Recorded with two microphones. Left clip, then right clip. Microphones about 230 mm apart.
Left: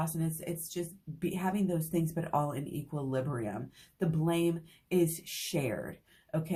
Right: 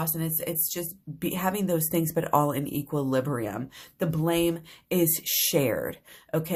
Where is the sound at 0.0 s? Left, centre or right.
Right.